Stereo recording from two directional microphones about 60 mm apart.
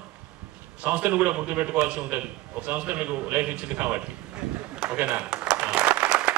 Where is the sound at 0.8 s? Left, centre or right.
Right.